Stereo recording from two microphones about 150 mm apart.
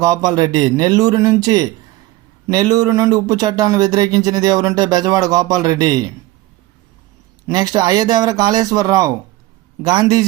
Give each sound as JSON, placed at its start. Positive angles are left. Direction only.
{"t": 0.0, "sound": "speech", "side_deg": -25}
{"t": 7.4, "sound": "speech", "side_deg": -25}